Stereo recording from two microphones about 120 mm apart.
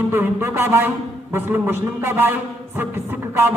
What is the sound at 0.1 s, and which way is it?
A man's voice, 20° right (ahead or behind).